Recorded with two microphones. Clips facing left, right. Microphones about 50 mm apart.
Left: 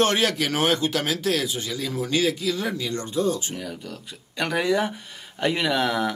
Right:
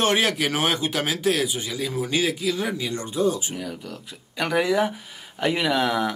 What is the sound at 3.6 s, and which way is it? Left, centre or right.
Speech, centre.